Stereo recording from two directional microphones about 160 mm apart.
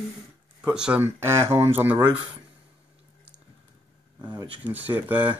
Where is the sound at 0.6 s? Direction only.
5° right (ahead or behind).